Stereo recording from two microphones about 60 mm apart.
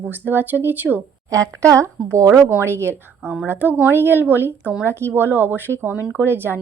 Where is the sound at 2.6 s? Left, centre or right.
Right.